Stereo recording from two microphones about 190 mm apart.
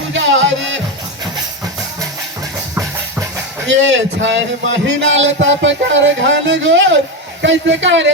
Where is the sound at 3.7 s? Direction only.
70° right (ahead or behind).